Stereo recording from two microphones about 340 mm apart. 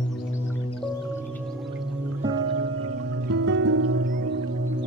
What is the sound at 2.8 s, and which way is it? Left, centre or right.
Music, right.